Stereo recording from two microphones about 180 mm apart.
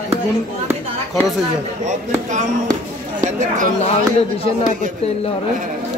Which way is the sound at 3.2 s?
45° right (ahead or behind).